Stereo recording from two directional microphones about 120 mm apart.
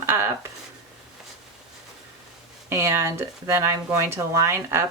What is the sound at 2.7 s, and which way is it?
Speech, 20° right (ahead or behind).